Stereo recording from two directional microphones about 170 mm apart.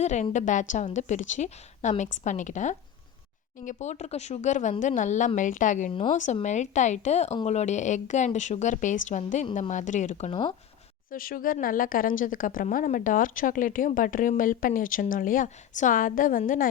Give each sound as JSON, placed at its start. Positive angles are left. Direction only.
{"t": 0.0, "sound": "a woman's voice", "side_deg": 45}
{"t": 5.9, "sound": "speech", "side_deg": 30}
{"t": 6.1, "sound": "a woman's voice", "side_deg": 45}
{"t": 11.1, "sound": "a woman's voice", "side_deg": 55}